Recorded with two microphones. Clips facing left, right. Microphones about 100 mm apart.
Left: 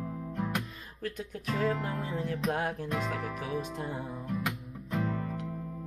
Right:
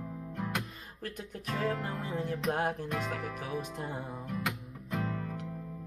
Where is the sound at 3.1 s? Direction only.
35° left (ahead or behind).